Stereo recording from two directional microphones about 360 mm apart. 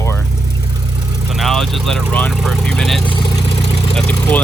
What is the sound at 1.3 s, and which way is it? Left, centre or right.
Vehicle, centre.